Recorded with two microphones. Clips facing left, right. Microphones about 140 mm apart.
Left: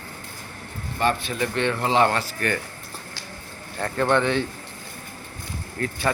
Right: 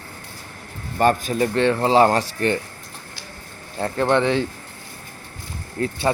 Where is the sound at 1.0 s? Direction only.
45° right (ahead or behind).